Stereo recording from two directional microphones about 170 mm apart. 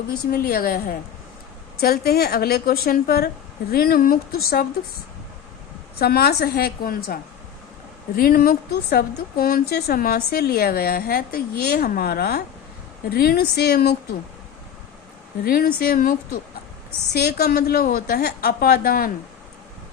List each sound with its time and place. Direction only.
0.3 s a woman's voice: 60° left (ahead or behind)
6.0 s a woman's voice: 65° left (ahead or behind)
15.4 s a woman's voice: 60° left (ahead or behind)
17.1 s a woman's voice: 70° left (ahead or behind)